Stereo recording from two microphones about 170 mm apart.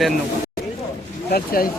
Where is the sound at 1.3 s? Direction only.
60° left (ahead or behind).